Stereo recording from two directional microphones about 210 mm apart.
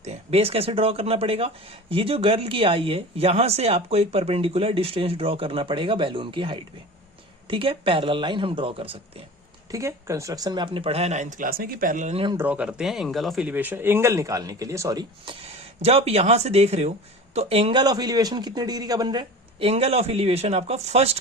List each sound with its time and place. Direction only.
0.0 s speech: 30° right (ahead or behind)
9.7 s speech: 15° right (ahead or behind)
12.4 s speech: 5° right (ahead or behind); by 21.2 s 30° right (ahead or behind)